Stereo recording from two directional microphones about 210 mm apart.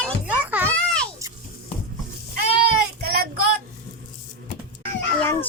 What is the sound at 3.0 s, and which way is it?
Child singing, 45° right (ahead or behind).